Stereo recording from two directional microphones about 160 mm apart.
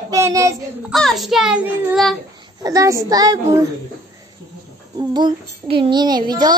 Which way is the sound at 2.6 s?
20° right (ahead or behind).